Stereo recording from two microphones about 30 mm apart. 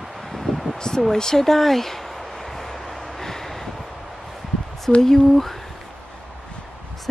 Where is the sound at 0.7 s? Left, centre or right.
Left.